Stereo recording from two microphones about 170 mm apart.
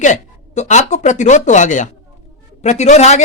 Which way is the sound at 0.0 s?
45° left (ahead or behind).